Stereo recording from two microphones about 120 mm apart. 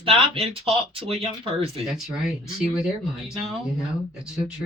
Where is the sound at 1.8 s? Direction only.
5° right (ahead or behind).